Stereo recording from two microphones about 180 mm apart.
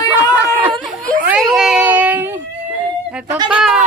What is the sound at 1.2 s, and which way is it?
A woman's voice, 5° right (ahead or behind).